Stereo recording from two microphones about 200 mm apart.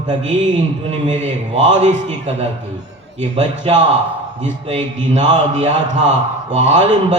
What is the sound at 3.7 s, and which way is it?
A man's voice, 30° right (ahead or behind).